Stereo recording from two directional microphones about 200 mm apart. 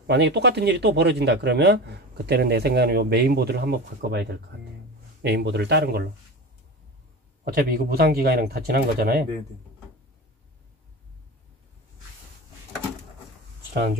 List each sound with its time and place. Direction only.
0.0 s speech: 55° right (ahead or behind)
7.4 s speech: 50° right (ahead or behind)